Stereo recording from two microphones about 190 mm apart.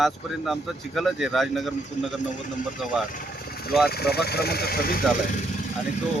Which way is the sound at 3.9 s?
55° left (ahead or behind).